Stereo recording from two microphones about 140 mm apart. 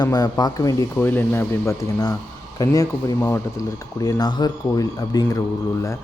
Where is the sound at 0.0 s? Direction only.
30° left (ahead or behind).